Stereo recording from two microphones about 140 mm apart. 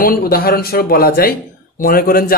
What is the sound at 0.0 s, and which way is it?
Speech, 90° left.